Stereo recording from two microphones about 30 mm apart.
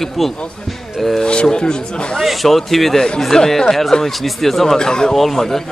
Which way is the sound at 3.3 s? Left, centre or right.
Left.